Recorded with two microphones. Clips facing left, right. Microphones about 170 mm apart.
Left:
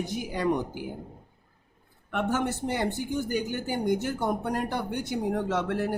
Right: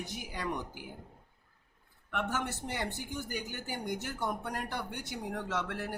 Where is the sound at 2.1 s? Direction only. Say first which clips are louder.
Left 7 dB; 25° left (ahead or behind).